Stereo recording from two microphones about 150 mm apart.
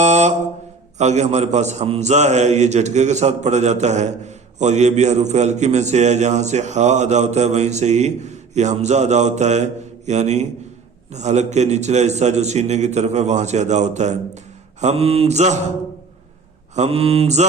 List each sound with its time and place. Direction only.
0.0 s mantra: 50° right (ahead or behind)
0.9 s a man's voice: 50° right (ahead or behind)
16.7 s a man's voice: 45° right (ahead or behind)